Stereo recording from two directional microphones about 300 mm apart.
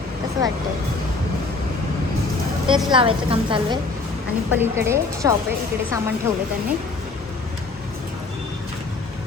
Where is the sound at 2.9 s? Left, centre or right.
Centre.